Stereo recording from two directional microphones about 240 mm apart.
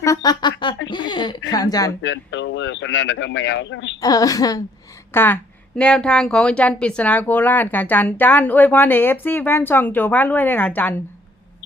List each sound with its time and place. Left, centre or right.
0.0 s music: centre
0.9 s speech: centre
2.0 s speech: left
4.0 s speech: centre